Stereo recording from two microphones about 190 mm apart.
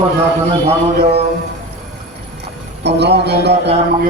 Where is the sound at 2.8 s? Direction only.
60° right (ahead or behind).